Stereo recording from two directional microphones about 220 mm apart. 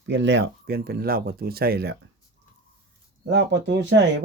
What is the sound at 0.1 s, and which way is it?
Speech, 55° right (ahead or behind).